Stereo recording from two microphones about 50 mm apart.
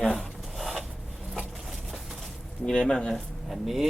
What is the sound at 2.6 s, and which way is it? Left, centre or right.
Speech, centre.